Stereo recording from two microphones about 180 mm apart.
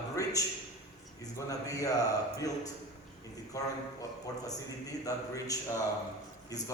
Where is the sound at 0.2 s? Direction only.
20° left (ahead or behind).